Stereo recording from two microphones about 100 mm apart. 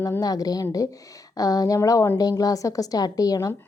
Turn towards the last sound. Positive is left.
turn(degrees=40)  # may be behind; listen again after turning